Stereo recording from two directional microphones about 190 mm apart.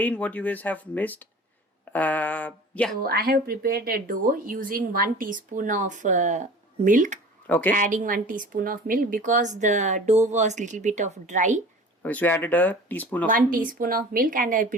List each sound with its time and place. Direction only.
0.0 s speech: 5° left (ahead or behind)
3.0 s speech: 50° right (ahead or behind)
7.4 s speech: 10° left (ahead or behind)
7.8 s a woman's voice: 45° right (ahead or behind)
12.0 s speech: 10° left (ahead or behind)
13.3 s speech: 45° right (ahead or behind)